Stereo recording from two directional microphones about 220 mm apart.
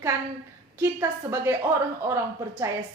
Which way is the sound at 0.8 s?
15° right (ahead or behind).